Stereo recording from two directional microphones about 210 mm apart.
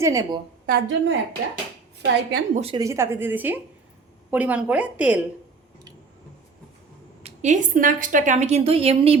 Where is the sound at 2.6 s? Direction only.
25° right (ahead or behind).